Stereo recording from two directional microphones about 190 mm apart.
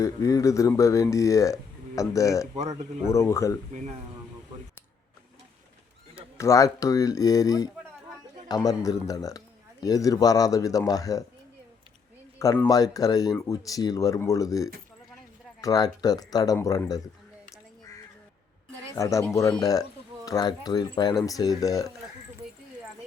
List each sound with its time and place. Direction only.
0.0 s speech: 15° left (ahead or behind)
6.3 s speech: 15° left (ahead or behind)
12.6 s speech: 20° left (ahead or behind)
18.9 s speech: 15° left (ahead or behind)